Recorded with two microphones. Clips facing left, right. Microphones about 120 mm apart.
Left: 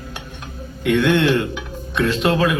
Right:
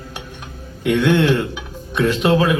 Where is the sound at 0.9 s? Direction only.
15° right (ahead or behind).